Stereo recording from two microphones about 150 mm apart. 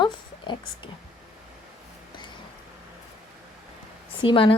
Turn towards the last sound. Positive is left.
turn(degrees=35)  # may be behind; listen again after turning